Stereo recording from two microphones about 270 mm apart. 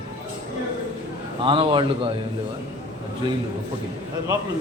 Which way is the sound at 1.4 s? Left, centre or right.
Centre.